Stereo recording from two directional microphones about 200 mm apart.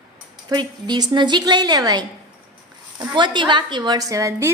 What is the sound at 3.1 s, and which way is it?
A woman's voice, 25° right (ahead or behind).